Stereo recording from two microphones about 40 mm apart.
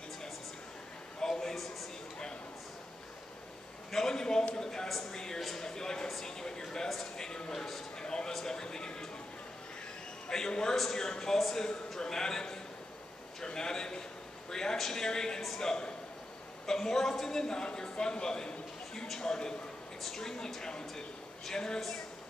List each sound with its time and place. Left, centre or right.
1.2 s a sound: centre
3.9 s a man's voice: centre
7.5 s a man's voice: centre
8.0 s a sound: centre
8.5 s speech: centre
10.3 s a man's voice: centre